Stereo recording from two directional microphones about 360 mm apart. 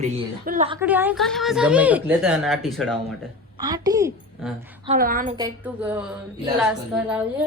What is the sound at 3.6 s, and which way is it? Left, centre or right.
A woman's voice, centre.